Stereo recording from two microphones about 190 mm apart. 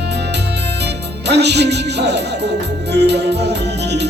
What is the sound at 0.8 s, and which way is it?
Music, 65° right (ahead or behind).